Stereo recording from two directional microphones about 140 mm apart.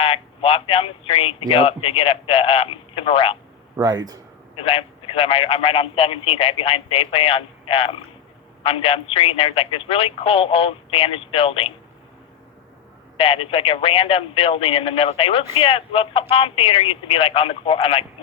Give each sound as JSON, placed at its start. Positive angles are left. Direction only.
{"t": 0.0, "sound": "a man's voice", "side_deg": 40}
{"t": 3.8, "sound": "a man's voice", "side_deg": -25}
{"t": 4.5, "sound": "a man's voice", "side_deg": 40}
{"t": 13.1, "sound": "a man's voice", "side_deg": 40}